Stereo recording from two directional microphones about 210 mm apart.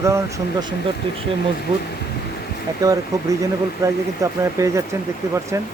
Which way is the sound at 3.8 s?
15° right (ahead or behind).